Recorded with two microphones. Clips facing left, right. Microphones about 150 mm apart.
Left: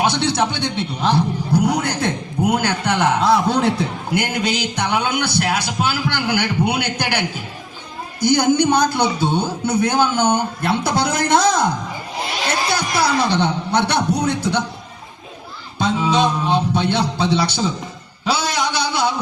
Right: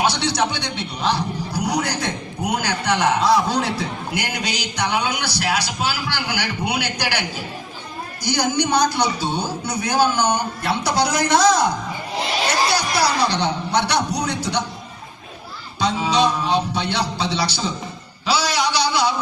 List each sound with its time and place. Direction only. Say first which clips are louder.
0.0 s a man's voice: left 2 dB; 55° left (ahead or behind)
12.7 s speech: left 1 dB; 55° left (ahead or behind)
15.8 s speech: left 1 dB; 55° left (ahead or behind)
18.3 s a sound: even; 55° left (ahead or behind)